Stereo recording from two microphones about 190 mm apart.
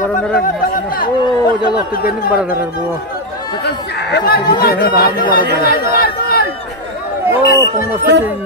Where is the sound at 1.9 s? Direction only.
50° left (ahead or behind).